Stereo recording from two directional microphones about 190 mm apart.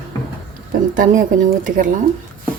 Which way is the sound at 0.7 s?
50° right (ahead or behind).